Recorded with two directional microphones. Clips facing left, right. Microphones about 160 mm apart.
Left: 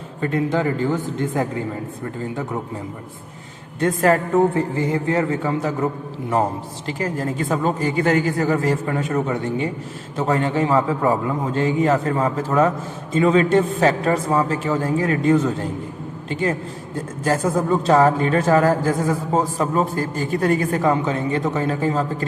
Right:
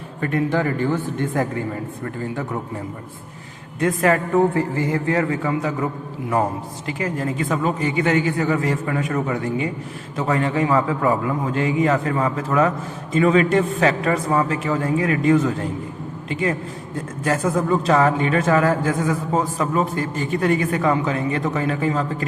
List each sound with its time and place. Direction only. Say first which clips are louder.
0.2 s a man's voice: even; 20° left (ahead or behind)
3.8 s a man's voice: left 1 dB; 35° left (ahead or behind)
15.2 s speech: even; centre (ahead or behind)
16.3 s a man's voice: even; 35° left (ahead or behind)
17.5 s speech: even; 5° left (ahead or behind)
17.8 s a man's voice: left 4 dB; 30° left (ahead or behind)